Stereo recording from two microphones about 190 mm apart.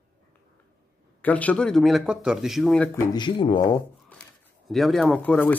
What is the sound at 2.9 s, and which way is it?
Speech, 20° left (ahead or behind).